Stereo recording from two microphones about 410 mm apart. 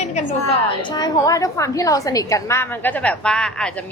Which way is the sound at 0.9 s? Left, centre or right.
Centre.